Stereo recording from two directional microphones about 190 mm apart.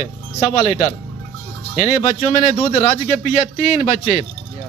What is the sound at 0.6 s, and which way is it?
A man's voice, 35° left (ahead or behind).